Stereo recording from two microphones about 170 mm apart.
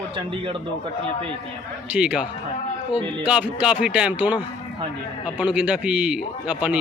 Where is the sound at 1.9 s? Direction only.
5° right (ahead or behind).